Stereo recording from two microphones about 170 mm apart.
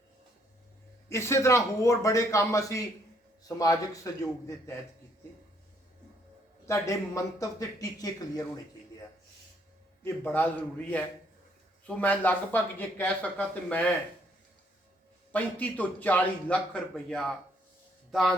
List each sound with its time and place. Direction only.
1.1 s a man's voice: 15° left (ahead or behind)
6.7 s a man's voice: 15° left (ahead or behind)
10.0 s speech: 10° left (ahead or behind)
15.3 s speech: 10° left (ahead or behind)